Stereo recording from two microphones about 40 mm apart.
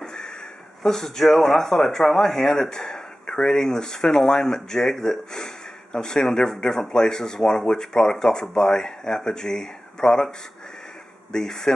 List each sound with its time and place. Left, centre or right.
0.0 s a sound: centre
0.8 s speech: centre
11.3 s speech: centre